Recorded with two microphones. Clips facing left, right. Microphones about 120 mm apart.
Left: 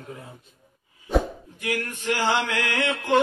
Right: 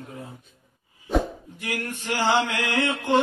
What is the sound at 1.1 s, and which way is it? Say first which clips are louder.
Plop: left 1 dB; centre (ahead or behind).